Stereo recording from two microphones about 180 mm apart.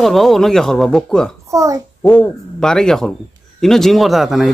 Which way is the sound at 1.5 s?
20° right (ahead or behind).